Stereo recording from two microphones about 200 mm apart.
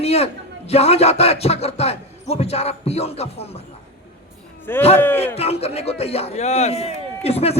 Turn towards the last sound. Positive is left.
turn(degrees=30)  # may be behind; listen again after turning